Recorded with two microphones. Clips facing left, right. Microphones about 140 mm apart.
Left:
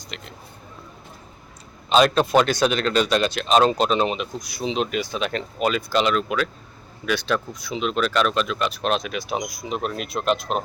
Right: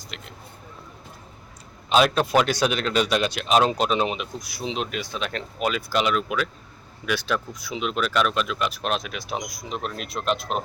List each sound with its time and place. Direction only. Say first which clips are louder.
0.1 s speech: left 3 dB; 5° right (ahead or behind)
1.9 s speech: left 2 dB; 5° right (ahead or behind)